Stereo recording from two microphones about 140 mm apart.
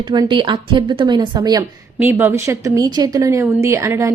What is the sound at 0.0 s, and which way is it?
A woman's voice, 35° right (ahead or behind).